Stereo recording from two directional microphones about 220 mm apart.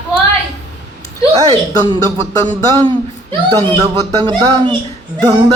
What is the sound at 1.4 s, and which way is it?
Speech, 20° right (ahead or behind).